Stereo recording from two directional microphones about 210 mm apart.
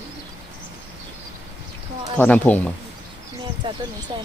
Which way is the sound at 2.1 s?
5° left (ahead or behind).